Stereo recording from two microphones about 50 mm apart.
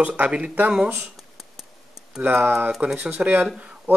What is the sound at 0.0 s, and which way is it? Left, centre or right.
Speech, right.